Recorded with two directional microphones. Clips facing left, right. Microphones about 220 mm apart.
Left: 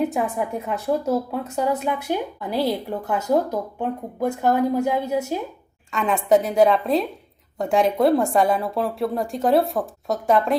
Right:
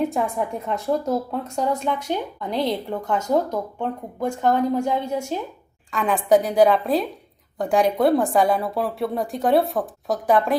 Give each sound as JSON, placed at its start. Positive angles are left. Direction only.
{"t": 0.0, "sound": "a woman's voice", "side_deg": 0}